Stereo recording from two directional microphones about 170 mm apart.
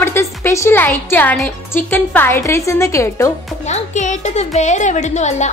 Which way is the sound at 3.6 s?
45° left (ahead or behind).